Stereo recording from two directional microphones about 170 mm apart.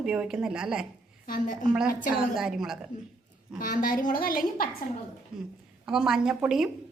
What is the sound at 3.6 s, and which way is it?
A woman's voice, 55° left (ahead or behind).